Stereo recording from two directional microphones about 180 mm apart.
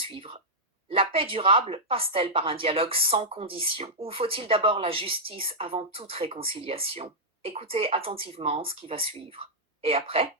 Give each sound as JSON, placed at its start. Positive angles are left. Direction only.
{"t": 0.0, "sound": "a woman's voice", "side_deg": -30}